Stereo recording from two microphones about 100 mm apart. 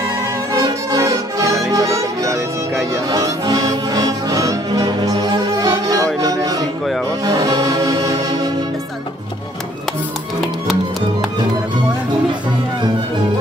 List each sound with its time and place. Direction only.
0.5 s music: 35° right (ahead or behind)
6.2 s a sound: 40° right (ahead or behind)
7.2 s music: 40° right (ahead or behind)
10.4 s music: centre (ahead or behind)